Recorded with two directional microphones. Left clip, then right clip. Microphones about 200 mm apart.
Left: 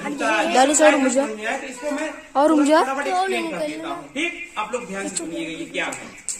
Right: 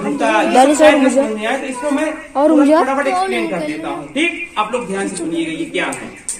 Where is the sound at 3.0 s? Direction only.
45° left (ahead or behind).